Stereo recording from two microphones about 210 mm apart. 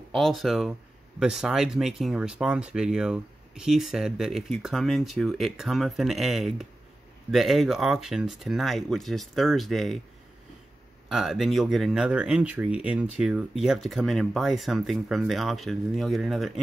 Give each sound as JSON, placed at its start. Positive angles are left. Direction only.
{"t": 0.1, "sound": "speech", "side_deg": 0}
{"t": 11.1, "sound": "speech", "side_deg": 0}